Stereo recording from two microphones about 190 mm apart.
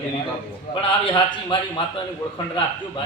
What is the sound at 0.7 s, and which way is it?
A man's voice, 25° left (ahead or behind).